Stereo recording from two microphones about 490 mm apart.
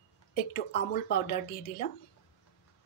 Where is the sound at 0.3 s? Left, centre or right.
Centre.